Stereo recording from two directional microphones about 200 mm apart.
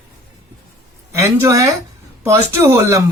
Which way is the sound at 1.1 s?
15° right (ahead or behind).